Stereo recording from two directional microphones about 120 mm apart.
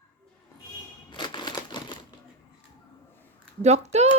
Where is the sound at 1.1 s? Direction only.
35° left (ahead or behind).